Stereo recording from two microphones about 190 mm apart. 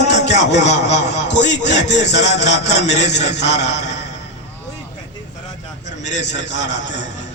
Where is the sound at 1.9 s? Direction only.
35° left (ahead or behind).